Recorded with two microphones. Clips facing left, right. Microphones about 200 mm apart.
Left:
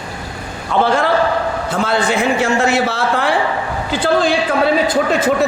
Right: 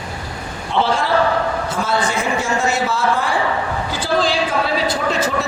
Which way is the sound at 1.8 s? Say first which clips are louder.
Left 5 dB; 65° left (ahead or behind).